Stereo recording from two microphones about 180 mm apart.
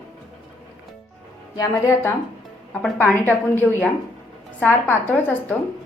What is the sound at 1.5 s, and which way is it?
A woman's voice, 15° left (ahead or behind).